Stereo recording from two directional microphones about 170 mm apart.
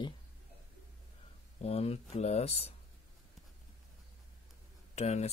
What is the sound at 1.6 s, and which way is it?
A man's voice, 35° left (ahead or behind).